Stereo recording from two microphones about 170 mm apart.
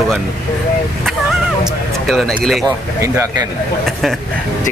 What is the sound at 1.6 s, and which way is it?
Speech, centre (ahead or behind).